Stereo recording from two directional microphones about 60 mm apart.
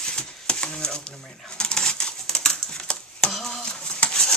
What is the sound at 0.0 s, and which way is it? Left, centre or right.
Typewriter, centre.